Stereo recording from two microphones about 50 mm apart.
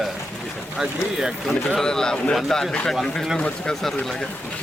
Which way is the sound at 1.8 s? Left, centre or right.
Centre.